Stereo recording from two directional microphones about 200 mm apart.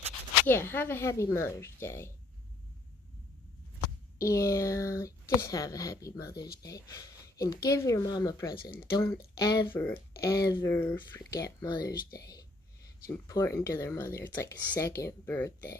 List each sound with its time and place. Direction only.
0.5 s speech: 10° left (ahead or behind)
4.2 s speech: 15° left (ahead or behind)